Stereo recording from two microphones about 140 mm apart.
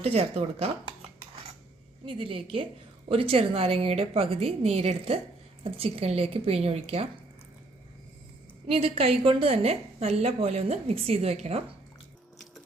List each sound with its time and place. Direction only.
0.0 s a woman's voice: 45° right (ahead or behind)
2.0 s a woman's voice: 40° right (ahead or behind)
8.6 s a woman's voice: 45° right (ahead or behind)